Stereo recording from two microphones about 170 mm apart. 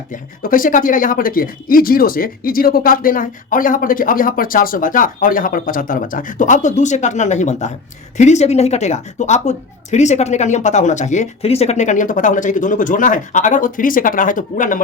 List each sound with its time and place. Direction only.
0.1 s speech: 55° left (ahead or behind)